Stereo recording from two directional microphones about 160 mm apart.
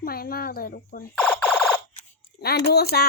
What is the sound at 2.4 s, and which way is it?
Speech, 75° left (ahead or behind).